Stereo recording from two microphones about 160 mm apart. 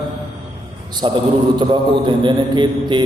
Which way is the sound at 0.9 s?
30° right (ahead or behind).